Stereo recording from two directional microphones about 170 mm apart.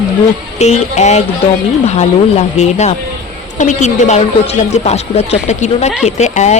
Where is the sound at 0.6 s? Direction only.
40° left (ahead or behind).